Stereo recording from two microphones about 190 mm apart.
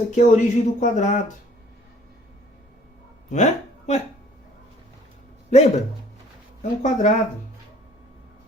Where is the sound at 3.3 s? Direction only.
35° left (ahead or behind).